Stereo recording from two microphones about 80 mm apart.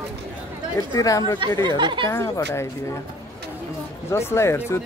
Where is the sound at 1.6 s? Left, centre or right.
Right.